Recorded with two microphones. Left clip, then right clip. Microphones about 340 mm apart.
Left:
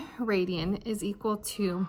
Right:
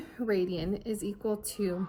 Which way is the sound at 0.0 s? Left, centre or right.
Centre.